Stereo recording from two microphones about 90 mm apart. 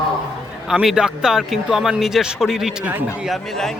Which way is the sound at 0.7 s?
5° right (ahead or behind).